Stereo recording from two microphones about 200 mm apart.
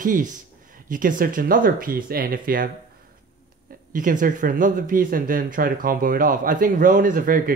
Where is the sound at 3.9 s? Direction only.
40° right (ahead or behind).